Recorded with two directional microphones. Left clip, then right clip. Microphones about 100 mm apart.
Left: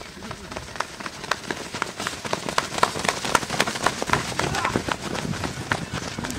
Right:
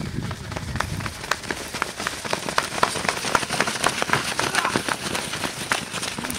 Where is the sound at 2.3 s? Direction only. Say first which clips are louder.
Right 1 dB; centre (ahead or behind).